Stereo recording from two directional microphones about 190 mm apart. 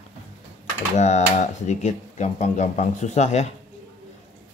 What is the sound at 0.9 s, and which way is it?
Speech, 35° left (ahead or behind).